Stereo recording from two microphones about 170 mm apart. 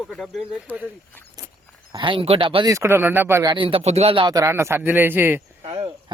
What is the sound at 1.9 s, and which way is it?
Speech, 30° right (ahead or behind).